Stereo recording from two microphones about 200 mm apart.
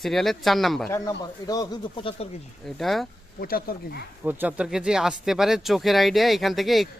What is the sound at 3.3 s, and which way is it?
Speech, 45° left (ahead or behind).